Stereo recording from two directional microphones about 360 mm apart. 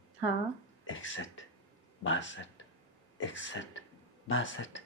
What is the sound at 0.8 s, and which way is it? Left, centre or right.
Speech, left.